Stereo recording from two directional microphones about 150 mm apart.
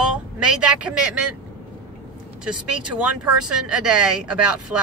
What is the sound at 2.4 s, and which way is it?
Speech, 5° right (ahead or behind).